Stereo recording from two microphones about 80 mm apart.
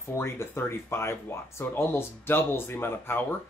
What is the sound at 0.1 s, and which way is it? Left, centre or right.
Speech, left.